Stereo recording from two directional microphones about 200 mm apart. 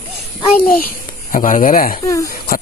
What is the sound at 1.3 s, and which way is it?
Speech, 40° left (ahead or behind).